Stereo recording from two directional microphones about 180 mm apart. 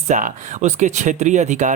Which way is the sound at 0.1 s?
45° right (ahead or behind).